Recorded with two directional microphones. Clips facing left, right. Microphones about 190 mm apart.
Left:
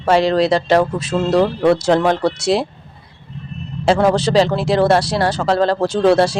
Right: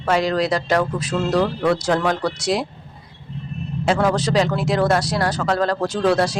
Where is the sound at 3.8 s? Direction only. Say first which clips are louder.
Left 5 dB; 30° left (ahead or behind).